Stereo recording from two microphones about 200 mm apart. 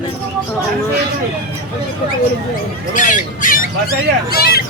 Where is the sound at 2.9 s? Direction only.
40° left (ahead or behind).